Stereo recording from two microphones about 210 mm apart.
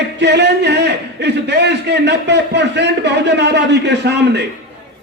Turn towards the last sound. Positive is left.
turn(degrees=-55)  # may be behind; listen again after turning